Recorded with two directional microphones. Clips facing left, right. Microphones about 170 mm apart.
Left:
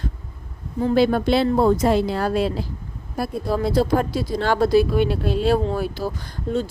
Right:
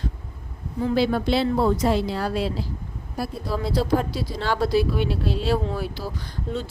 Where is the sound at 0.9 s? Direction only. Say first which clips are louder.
Left 4 dB; 50° left (ahead or behind).